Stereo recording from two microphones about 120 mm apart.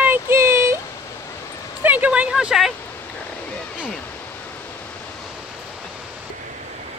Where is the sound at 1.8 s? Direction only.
15° right (ahead or behind).